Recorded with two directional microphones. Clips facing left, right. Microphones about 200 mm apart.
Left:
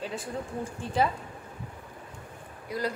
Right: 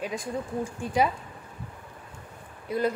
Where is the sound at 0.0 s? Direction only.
15° right (ahead or behind).